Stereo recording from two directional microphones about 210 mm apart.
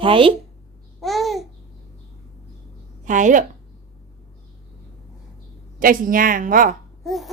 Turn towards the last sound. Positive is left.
turn(degrees=0)  # may be behind; listen again after turning